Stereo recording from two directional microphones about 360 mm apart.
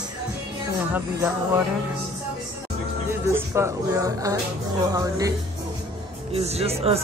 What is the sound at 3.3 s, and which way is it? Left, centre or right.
Speech, centre.